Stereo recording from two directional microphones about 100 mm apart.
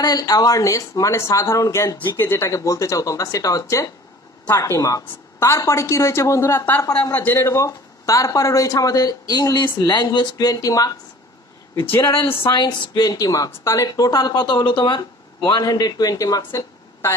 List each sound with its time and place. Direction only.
0.0 s a woman's voice: 40° left (ahead or behind)
11.9 s a woman's voice: 25° left (ahead or behind)
12.4 s a woman's voice: 50° left (ahead or behind)